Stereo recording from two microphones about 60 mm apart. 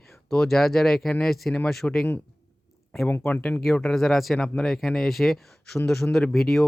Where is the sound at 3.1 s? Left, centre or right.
Left.